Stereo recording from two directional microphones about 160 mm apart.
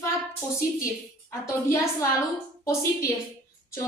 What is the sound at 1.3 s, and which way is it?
Speech, 20° left (ahead or behind).